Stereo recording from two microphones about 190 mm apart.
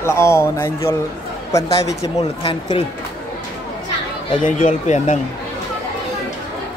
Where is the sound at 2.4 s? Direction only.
30° left (ahead or behind).